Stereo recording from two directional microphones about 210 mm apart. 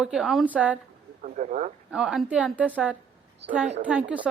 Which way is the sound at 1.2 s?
35° right (ahead or behind).